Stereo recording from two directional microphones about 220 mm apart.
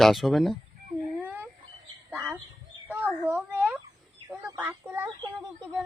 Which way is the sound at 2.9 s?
10° right (ahead or behind).